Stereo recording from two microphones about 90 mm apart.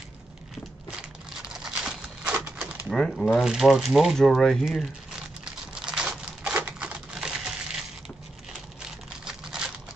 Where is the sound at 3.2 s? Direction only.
5° right (ahead or behind).